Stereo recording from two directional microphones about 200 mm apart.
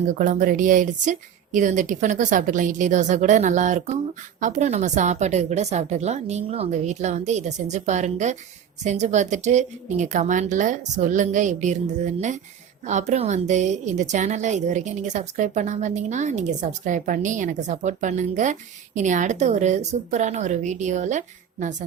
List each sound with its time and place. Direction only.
0.1 s a woman's voice: 40° right (ahead or behind)